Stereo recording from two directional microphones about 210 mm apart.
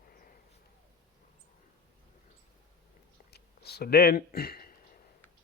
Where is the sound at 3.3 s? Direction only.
50° left (ahead or behind).